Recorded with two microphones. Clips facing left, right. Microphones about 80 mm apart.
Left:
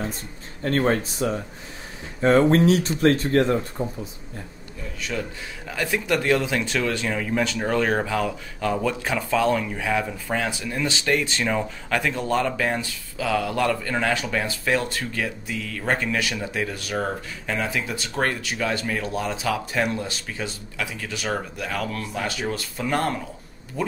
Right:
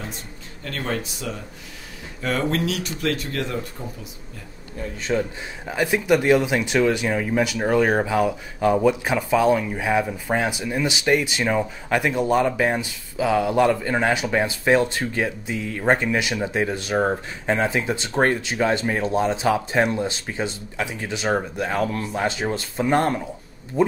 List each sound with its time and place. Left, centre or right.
0.7 s speech: left
3.5 s speech: left
5.1 s speech: right